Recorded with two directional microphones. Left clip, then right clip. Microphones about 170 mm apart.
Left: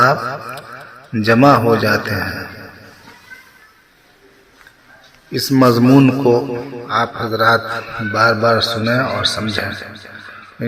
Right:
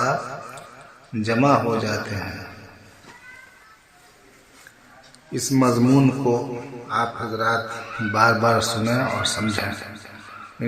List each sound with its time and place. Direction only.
0.0 s speech: 30° left (ahead or behind)
5.3 s a man's voice: 25° left (ahead or behind)
8.1 s a man's voice: centre (ahead or behind)